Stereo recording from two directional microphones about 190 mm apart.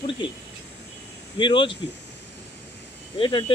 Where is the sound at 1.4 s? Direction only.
25° left (ahead or behind).